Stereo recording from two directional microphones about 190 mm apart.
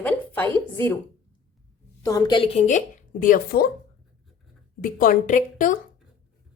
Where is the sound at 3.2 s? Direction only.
50° left (ahead or behind).